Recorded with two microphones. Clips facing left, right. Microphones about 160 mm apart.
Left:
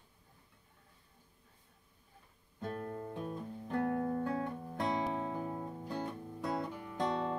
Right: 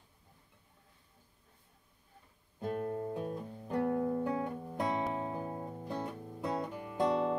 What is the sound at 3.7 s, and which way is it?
Music, 15° right (ahead or behind).